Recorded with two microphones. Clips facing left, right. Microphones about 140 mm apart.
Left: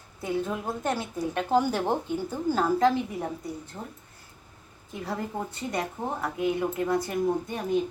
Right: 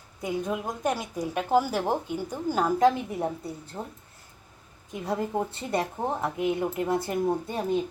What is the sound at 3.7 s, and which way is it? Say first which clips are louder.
Speech: right 3 dB; 35° right (ahead or behind).